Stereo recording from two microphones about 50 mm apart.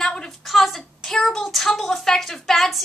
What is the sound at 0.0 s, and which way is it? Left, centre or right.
Speech, centre.